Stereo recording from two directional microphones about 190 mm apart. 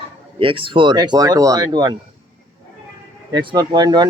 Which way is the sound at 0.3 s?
25° right (ahead or behind).